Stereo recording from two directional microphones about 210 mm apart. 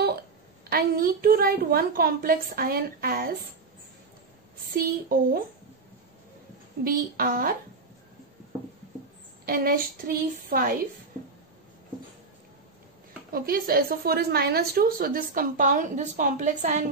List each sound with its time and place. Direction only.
0.7 s a woman's voice: 45° right (ahead or behind)
4.6 s a woman's voice: 45° right (ahead or behind)
6.8 s a woman's voice: 45° right (ahead or behind)
9.5 s a woman's voice: 45° right (ahead or behind)
13.3 s a woman's voice: 45° right (ahead or behind)